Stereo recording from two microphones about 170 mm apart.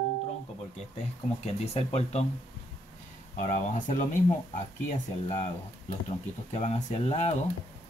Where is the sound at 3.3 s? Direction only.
45° left (ahead or behind).